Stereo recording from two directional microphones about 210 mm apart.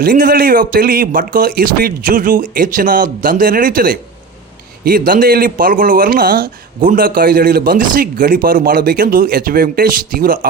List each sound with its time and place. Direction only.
0.0 s a man's voice: 40° right (ahead or behind)